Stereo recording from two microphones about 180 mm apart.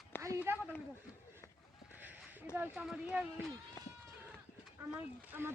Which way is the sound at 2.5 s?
5° right (ahead or behind).